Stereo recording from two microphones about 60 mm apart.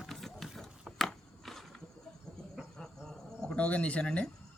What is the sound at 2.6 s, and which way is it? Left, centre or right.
Cricket, centre.